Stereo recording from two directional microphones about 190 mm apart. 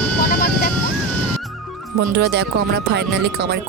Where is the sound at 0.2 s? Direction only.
55° left (ahead or behind).